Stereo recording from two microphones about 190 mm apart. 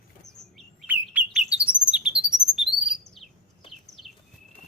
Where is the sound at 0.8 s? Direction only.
10° right (ahead or behind).